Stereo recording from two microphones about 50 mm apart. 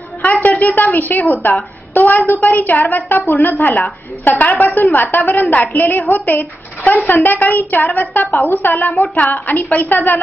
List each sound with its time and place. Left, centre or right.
0.2 s a woman's voice: left
8.3 s a woman's voice: left
8.6 s a woman's voice: left